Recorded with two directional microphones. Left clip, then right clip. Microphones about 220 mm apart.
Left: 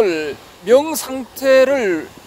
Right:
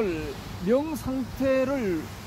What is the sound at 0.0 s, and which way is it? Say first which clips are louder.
Speech: left 12 dB; 50° left (ahead or behind).